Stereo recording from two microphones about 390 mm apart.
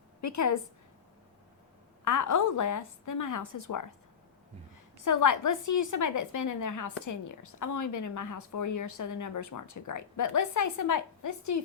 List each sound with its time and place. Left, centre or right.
0.2 s a woman's voice: left
2.0 s a woman's voice: left
5.0 s a woman's voice: left